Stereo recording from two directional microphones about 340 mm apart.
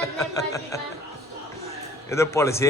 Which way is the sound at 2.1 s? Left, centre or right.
Centre.